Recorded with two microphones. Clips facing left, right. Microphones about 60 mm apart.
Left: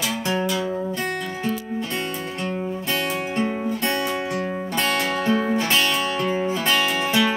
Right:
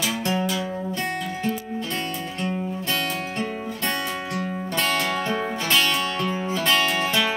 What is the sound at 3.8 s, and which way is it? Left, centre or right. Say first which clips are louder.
Music: left 1 dB; centre.